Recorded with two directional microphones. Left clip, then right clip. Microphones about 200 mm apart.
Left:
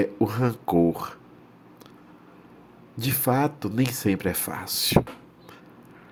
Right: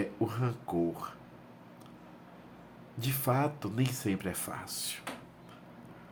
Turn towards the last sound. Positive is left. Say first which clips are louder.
# left 16 dB
turn(degrees=40)  # may be behind; listen again after turning